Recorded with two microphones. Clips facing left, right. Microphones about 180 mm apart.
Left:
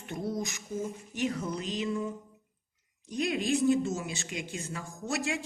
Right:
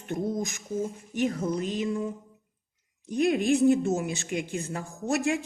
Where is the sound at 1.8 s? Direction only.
30° right (ahead or behind).